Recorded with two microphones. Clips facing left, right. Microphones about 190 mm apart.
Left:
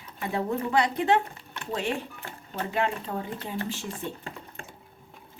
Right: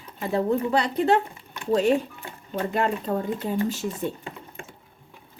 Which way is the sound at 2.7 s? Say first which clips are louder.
Right 3 dB; 40° right (ahead or behind).